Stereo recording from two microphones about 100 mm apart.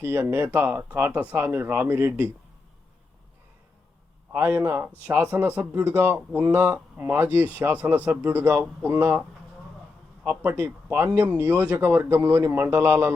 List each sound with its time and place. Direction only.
0.0 s speech: 20° right (ahead or behind)
4.3 s speech: 20° right (ahead or behind)
10.2 s speech: 20° right (ahead or behind)